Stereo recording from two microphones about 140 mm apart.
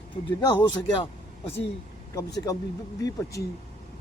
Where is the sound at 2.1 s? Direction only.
25° left (ahead or behind).